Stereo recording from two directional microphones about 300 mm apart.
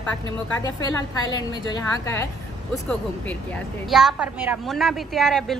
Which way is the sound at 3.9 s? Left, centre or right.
Centre.